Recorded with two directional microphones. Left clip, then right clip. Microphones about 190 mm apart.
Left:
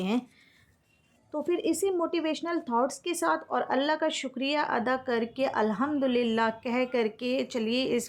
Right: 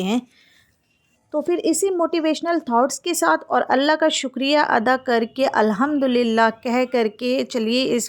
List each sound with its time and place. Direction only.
0.0 s speech: 35° right (ahead or behind)
1.3 s speech: 30° right (ahead or behind)